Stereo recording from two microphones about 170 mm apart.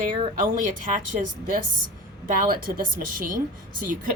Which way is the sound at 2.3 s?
60° right (ahead or behind).